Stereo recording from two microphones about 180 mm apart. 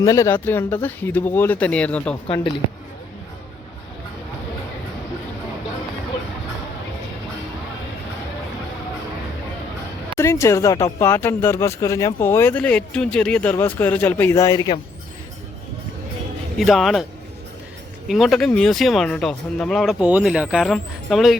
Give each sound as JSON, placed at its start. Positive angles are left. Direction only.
{"t": 0.0, "sound": "speech", "side_deg": 15}
{"t": 2.2, "sound": "speech", "side_deg": 30}
{"t": 10.2, "sound": "speech", "side_deg": 15}
{"t": 16.6, "sound": "speech", "side_deg": 0}
{"t": 18.1, "sound": "speech", "side_deg": 0}